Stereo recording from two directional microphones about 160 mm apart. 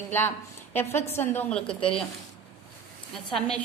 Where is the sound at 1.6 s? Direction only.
35° left (ahead or behind).